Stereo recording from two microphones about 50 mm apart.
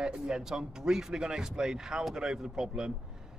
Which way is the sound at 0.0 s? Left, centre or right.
Centre.